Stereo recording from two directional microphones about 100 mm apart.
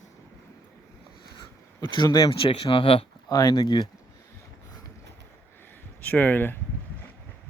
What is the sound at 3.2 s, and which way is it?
Speech, 30° left (ahead or behind).